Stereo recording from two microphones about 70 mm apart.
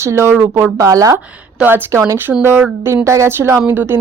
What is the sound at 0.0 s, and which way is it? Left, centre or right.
Speech, right.